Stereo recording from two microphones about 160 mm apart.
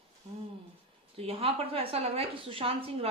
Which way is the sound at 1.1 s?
35° right (ahead or behind).